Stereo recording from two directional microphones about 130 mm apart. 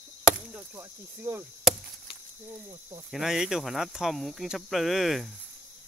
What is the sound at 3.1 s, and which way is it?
Speech, 5° right (ahead or behind).